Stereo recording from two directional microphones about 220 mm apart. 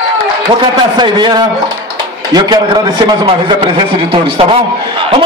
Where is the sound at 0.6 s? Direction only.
20° right (ahead or behind).